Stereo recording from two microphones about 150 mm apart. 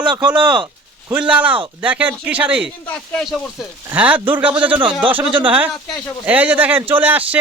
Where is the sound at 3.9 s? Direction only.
10° right (ahead or behind).